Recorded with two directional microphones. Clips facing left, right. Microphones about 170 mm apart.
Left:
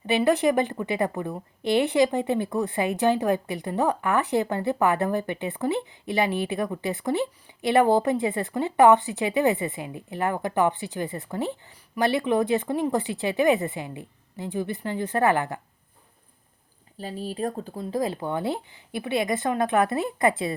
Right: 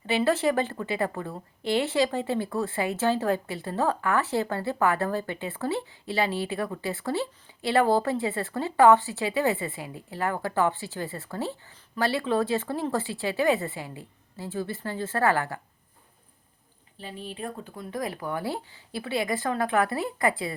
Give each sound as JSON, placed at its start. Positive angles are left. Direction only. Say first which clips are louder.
{"t": 0.0, "sound": "a woman's voice", "louder": "left 3 dB", "side_deg": 15}
{"t": 17.0, "sound": "speech", "louder": "left 7 dB", "side_deg": 40}